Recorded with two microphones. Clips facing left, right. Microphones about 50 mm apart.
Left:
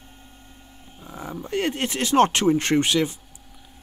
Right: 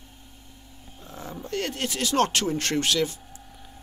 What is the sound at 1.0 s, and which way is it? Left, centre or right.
Speech, centre.